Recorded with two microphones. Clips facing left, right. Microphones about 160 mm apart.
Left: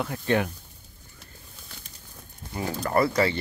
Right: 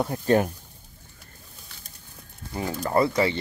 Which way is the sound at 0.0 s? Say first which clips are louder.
Right 4 dB; 40° right (ahead or behind).